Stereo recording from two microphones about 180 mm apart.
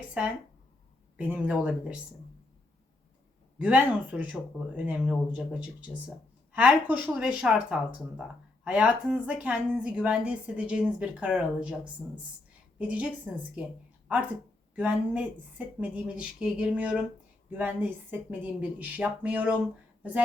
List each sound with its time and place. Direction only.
0.2 s a woman's voice: 5° right (ahead or behind)
3.6 s a woman's voice: 5° right (ahead or behind)
12.9 s a woman's voice: 10° right (ahead or behind)
14.8 s a woman's voice: 5° right (ahead or behind)